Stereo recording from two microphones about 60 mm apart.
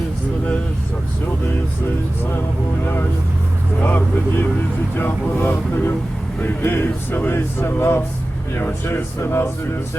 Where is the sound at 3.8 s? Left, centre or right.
Left.